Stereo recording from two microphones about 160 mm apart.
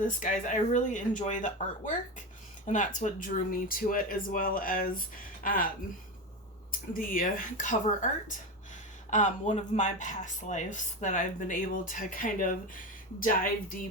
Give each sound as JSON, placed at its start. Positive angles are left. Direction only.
{"t": 0.0, "sound": "speech", "side_deg": 55}
{"t": 9.0, "sound": "speech", "side_deg": 50}